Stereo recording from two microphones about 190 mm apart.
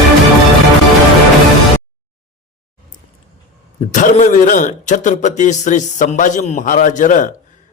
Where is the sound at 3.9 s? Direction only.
40° left (ahead or behind).